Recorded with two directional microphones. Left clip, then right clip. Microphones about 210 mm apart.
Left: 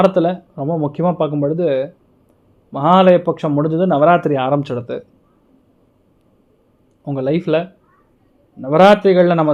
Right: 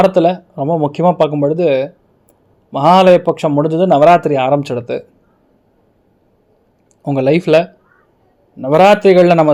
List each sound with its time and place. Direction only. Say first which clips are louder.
0.0 s speech: right 3 dB; centre (ahead or behind)
7.0 s speech: right 6 dB; 10° right (ahead or behind)